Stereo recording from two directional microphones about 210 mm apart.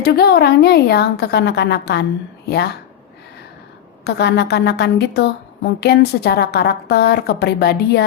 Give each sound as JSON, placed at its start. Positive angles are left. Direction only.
{"t": 0.0, "sound": "a woman's voice", "side_deg": 50}
{"t": 4.0, "sound": "a woman's voice", "side_deg": 55}